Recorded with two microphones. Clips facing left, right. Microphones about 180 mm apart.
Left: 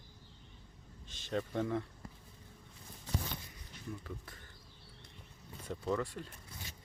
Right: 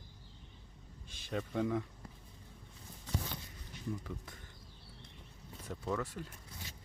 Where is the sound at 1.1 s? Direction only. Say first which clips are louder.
Left 1 dB; 5° right (ahead or behind).